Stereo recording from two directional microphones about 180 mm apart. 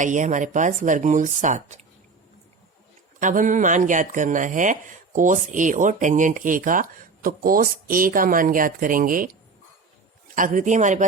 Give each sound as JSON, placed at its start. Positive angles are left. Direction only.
{"t": 0.0, "sound": "speech", "side_deg": -45}
{"t": 3.2, "sound": "speech", "side_deg": -45}
{"t": 10.3, "sound": "speech", "side_deg": -45}